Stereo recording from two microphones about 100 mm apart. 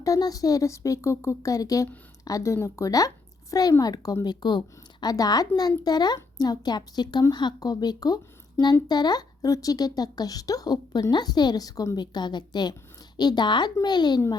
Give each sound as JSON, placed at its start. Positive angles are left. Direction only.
{"t": 0.0, "sound": "a woman's voice", "side_deg": 35}